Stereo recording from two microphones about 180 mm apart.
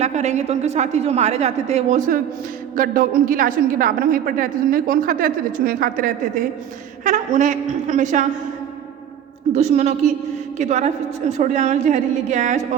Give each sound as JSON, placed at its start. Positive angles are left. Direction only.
{"t": 0.0, "sound": "a woman's voice", "side_deg": -40}
{"t": 9.6, "sound": "a woman's voice", "side_deg": -40}